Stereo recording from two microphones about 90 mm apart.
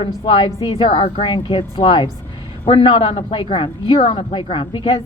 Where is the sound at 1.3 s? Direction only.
70° left (ahead or behind).